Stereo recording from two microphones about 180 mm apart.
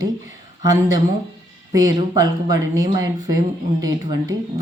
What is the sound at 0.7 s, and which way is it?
Speech, 20° right (ahead or behind).